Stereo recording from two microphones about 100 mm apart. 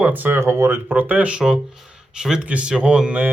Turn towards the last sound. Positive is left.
turn(degrees=-10)  # may be behind; listen again after turning